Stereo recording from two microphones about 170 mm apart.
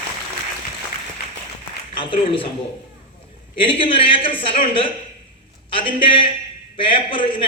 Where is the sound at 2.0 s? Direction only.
30° left (ahead or behind).